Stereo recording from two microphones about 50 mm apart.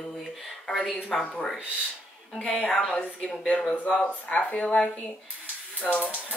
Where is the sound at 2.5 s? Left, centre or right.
Centre; by 4.9 s left.